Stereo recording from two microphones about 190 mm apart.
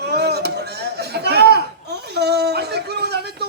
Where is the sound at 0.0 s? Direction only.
60° right (ahead or behind).